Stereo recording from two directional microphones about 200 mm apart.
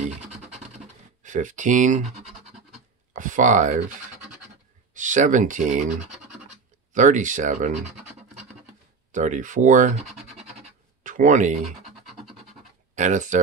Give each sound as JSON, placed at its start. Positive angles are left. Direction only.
{"t": 1.2, "sound": "speech", "side_deg": -40}
{"t": 3.1, "sound": "speech", "side_deg": -40}
{"t": 4.9, "sound": "speech", "side_deg": -40}
{"t": 9.1, "sound": "speech", "side_deg": -40}
{"t": 10.0, "sound": "scratch", "side_deg": 0}
{"t": 11.1, "sound": "speech", "side_deg": -40}
{"t": 11.8, "sound": "music", "side_deg": 0}
{"t": 12.9, "sound": "speech", "side_deg": -40}